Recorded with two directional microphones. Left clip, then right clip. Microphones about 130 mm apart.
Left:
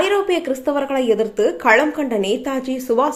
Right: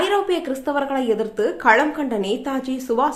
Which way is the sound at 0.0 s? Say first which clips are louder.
Left 2 dB; 15° left (ahead or behind).